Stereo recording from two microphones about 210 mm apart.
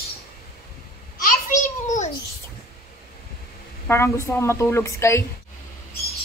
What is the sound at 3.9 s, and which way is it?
A woman's voice, 15° left (ahead or behind).